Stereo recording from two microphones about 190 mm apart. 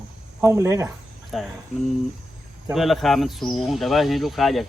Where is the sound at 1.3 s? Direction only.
Centre (ahead or behind).